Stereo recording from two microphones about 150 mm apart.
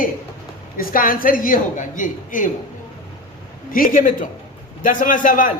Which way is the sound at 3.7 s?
65° left (ahead or behind).